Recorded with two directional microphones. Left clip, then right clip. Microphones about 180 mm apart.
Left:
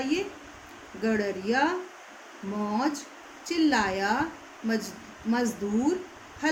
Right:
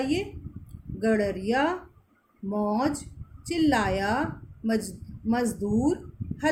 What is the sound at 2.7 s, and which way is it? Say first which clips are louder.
A woman's voice: right 1 dB; 45° right (ahead or behind).